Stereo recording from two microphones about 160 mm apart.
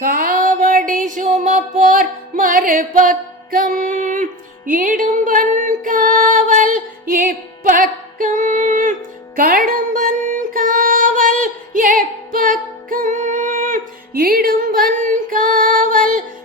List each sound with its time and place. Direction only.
0.0 s music: 60° right (ahead or behind)